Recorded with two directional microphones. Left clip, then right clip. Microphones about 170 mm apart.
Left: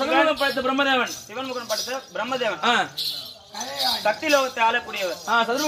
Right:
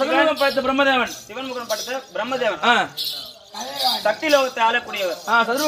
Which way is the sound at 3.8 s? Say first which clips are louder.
Right 3 dB; 10° right (ahead or behind).